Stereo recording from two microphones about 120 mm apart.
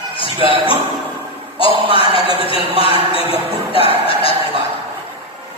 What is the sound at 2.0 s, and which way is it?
Speech, 50° left (ahead or behind).